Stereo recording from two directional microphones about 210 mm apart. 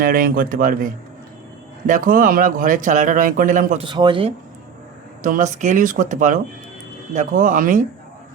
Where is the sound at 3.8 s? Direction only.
20° right (ahead or behind).